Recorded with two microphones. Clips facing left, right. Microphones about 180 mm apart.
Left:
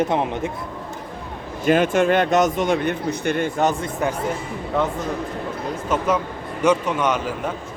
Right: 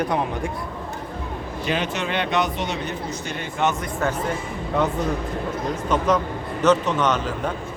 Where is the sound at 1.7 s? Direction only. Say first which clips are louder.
Left 9 dB; 50° left (ahead or behind).